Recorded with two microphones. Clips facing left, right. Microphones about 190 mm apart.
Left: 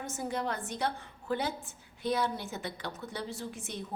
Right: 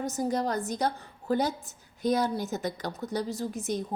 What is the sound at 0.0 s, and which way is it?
A woman's voice, 40° right (ahead or behind).